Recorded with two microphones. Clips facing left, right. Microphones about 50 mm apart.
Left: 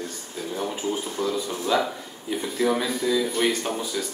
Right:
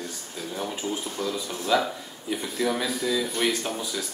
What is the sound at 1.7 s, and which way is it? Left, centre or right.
Speech, centre.